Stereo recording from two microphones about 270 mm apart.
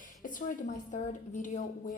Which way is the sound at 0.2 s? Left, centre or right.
Left.